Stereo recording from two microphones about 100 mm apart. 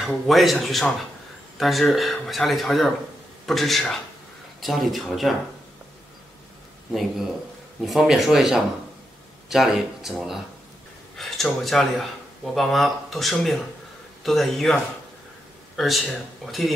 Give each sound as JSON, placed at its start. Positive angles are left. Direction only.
{"t": 0.0, "sound": "speech", "side_deg": 0}
{"t": 6.9, "sound": "speech", "side_deg": 0}